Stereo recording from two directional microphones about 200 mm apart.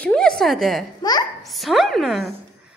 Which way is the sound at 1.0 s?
20° left (ahead or behind).